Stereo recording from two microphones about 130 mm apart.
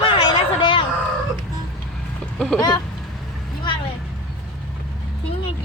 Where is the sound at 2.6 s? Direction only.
30° left (ahead or behind).